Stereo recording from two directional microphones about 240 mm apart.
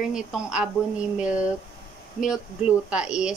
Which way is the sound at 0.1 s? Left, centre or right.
Centre.